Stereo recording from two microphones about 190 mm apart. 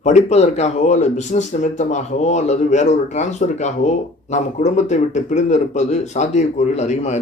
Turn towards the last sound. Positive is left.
turn(degrees=35)  # may be behind; listen again after turning